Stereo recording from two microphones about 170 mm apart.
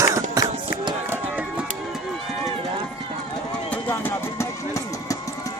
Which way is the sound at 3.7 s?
10° left (ahead or behind).